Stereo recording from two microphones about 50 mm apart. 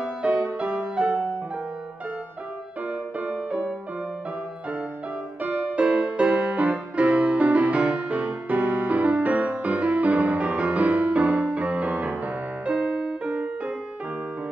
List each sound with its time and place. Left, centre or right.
0.0 s music: right
2.9 s music: right
5.4 s music: right